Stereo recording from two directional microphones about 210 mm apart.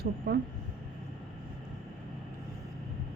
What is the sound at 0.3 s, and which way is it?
Speech, 55° right (ahead or behind).